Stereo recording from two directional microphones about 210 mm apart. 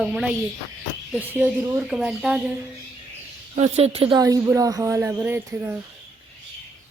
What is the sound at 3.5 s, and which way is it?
Speech, 30° right (ahead or behind).